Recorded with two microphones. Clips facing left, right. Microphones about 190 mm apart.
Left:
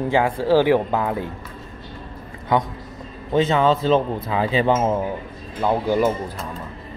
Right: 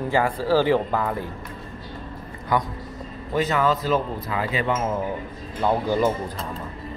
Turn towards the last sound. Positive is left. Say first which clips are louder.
# left 2 dB
turn(degrees=15)  # may be behind; listen again after turning